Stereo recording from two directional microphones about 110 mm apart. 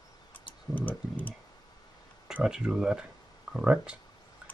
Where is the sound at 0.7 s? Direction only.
15° left (ahead or behind).